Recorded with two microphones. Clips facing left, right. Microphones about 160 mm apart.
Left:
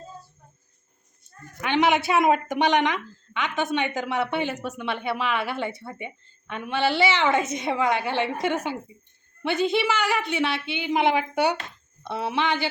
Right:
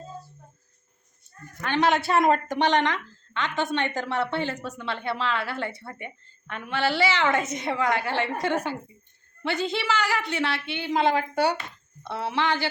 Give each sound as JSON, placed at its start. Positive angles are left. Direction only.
{"t": 1.6, "sound": "speech", "side_deg": 15}